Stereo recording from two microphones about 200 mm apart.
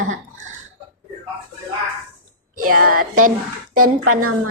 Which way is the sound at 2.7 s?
45° right (ahead or behind).